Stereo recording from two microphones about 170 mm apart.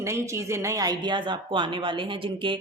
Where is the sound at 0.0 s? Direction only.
15° right (ahead or behind).